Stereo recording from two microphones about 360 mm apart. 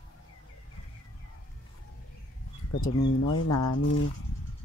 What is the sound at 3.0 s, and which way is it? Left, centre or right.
Speech, left.